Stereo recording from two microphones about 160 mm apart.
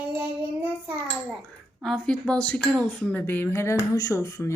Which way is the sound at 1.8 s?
5° left (ahead or behind).